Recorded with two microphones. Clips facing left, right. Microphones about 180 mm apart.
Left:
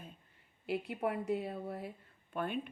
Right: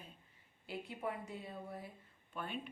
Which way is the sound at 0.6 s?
65° left (ahead or behind).